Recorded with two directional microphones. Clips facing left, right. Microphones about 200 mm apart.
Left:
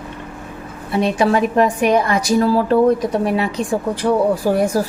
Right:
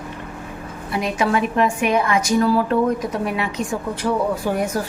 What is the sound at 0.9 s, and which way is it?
A woman's voice, 30° left (ahead or behind).